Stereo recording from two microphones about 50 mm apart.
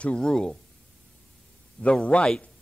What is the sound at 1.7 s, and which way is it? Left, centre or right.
Speech, centre.